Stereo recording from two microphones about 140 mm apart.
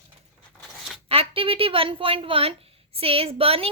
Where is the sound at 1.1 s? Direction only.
40° right (ahead or behind).